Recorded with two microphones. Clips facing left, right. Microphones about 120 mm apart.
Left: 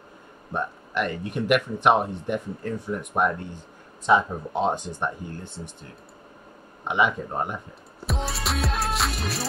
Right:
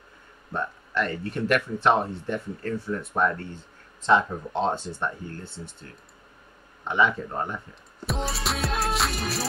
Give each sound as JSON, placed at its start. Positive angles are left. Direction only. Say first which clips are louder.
{"t": 0.5, "sound": "speech", "louder": "left 1 dB", "side_deg": 15}
{"t": 8.1, "sound": "music", "louder": "even", "side_deg": 0}